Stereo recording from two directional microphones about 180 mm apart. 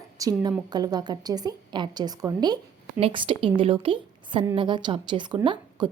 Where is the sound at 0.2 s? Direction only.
20° right (ahead or behind).